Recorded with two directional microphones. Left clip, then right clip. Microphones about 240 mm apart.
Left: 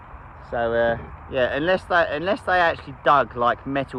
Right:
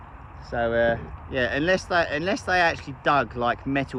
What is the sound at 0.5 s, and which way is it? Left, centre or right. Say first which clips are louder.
Speech: left 1 dB; left.